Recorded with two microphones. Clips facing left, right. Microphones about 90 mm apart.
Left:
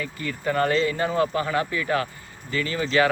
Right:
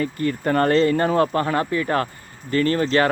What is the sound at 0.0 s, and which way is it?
Speech, 45° right (ahead or behind).